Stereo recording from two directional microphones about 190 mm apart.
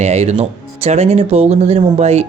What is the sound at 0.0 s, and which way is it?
Speech, 35° right (ahead or behind).